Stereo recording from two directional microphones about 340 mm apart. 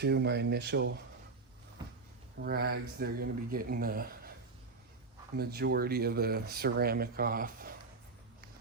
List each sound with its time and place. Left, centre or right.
0.0 s speech: right
2.4 s speech: right
5.4 s speech: right